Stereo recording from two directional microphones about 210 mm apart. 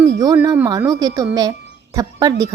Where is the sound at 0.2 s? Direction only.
15° right (ahead or behind).